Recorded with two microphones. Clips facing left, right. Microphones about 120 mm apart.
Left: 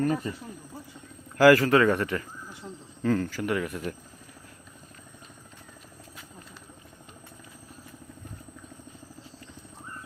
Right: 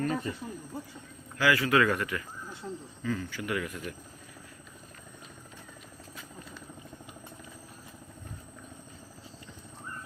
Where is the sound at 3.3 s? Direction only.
40° left (ahead or behind).